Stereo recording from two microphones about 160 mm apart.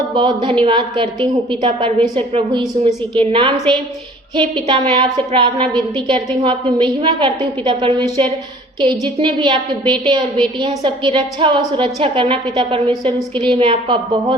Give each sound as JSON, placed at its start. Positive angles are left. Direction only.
{"t": 0.1, "sound": "a woman's voice", "side_deg": -30}
{"t": 4.7, "sound": "a woman's voice", "side_deg": -30}